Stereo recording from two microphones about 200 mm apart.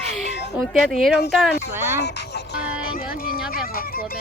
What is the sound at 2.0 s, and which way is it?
Music, 50° left (ahead or behind).